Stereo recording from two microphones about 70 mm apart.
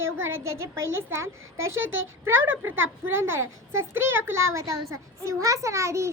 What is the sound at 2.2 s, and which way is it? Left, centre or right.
A child's voice, right.